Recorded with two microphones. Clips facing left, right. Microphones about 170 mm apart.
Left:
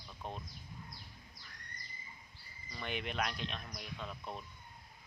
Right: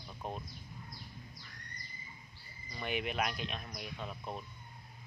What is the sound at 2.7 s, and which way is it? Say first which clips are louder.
Speech: right 3 dB; 5° right (ahead or behind).